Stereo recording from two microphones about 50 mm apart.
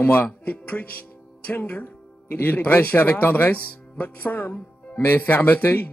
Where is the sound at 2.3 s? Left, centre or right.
Left.